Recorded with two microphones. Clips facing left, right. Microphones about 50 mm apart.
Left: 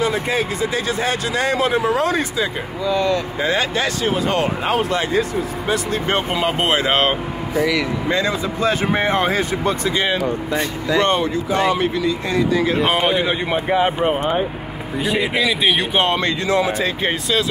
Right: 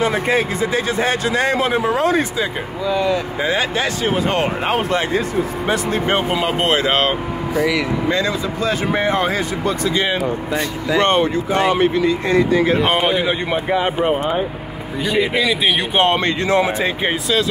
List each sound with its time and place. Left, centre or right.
0.0 s speech: right
2.8 s speech: centre; by 5.0 s right
6.3 s speech: centre
8.5 s speech: left
11.0 s speech: right
12.7 s speech: centre
15.0 s speech: centre
16.1 s speech: right